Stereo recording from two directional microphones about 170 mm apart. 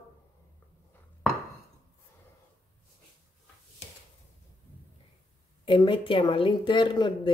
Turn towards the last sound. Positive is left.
turn(degrees=25)  # may be behind; listen again after turning